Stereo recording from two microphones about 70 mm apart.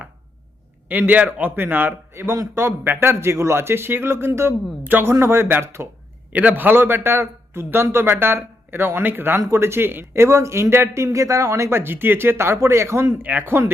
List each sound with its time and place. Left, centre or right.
0.9 s a man's voice: right
5.2 s speech: right
6.3 s speech: right
11.8 s speech: right
13.2 s speech: right